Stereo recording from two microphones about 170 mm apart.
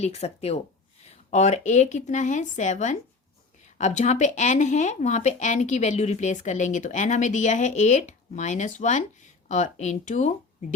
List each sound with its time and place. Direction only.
0.0 s speech: 40° left (ahead or behind)